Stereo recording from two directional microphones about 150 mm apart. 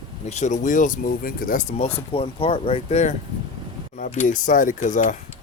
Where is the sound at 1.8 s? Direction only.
40° left (ahead or behind).